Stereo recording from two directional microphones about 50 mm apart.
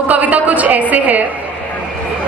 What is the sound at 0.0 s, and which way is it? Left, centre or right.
A woman's voice, right.